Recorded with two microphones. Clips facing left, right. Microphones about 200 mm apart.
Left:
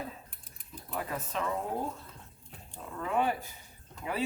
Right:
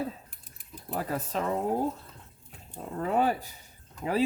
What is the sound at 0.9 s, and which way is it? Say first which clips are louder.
Speech: right 5 dB; 35° right (ahead or behind).